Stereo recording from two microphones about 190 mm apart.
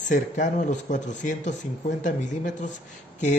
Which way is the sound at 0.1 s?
40° left (ahead or behind).